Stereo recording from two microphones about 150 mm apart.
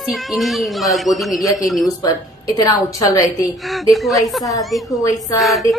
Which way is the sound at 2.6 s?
25° left (ahead or behind).